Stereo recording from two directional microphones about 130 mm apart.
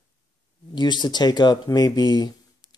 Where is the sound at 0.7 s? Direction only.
35° left (ahead or behind).